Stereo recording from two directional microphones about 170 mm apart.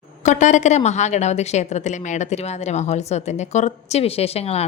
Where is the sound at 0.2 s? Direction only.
45° left (ahead or behind).